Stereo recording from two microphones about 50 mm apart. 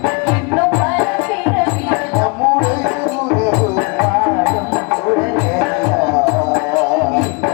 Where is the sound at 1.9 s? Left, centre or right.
Centre.